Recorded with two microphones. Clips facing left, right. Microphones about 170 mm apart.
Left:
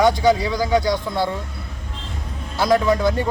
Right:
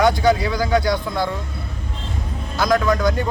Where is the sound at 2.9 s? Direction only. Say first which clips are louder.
Left 1 dB; 25° left (ahead or behind).